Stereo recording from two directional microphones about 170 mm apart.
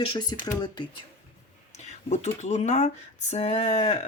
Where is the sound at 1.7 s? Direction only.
40° left (ahead or behind).